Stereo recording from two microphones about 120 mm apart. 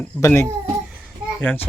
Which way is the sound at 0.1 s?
15° left (ahead or behind).